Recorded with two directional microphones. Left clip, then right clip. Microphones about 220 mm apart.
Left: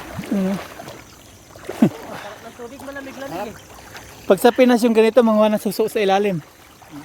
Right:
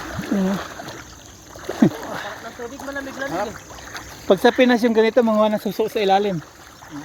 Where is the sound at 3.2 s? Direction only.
15° right (ahead or behind).